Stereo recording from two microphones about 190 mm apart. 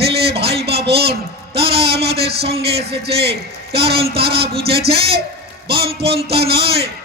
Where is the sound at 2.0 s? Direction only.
60° right (ahead or behind).